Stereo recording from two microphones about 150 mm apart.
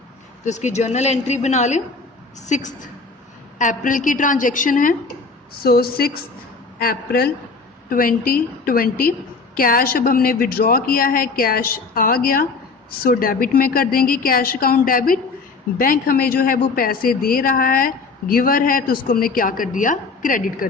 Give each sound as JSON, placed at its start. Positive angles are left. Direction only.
{"t": 0.4, "sound": "a woman's voice", "side_deg": 50}
{"t": 5.6, "sound": "a woman's voice", "side_deg": 90}
{"t": 7.9, "sound": "a woman's voice", "side_deg": 70}